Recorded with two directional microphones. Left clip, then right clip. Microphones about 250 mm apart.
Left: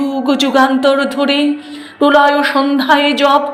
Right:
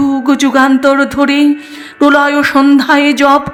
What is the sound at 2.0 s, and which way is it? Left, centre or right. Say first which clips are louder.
Speech: right 1 dB; right.